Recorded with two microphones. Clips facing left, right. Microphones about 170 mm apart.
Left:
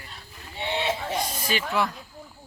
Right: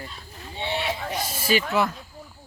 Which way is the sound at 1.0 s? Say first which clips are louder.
Left 1 dB; centre (ahead or behind).